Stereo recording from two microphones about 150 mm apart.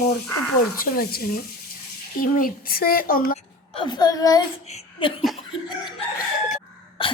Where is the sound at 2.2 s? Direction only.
70° left (ahead or behind).